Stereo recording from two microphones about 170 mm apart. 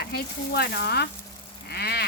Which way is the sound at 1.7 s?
70° left (ahead or behind).